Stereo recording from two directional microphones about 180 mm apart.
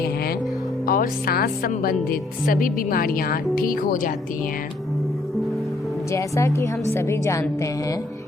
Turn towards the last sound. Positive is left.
turn(degrees=15)  # may be behind; listen again after turning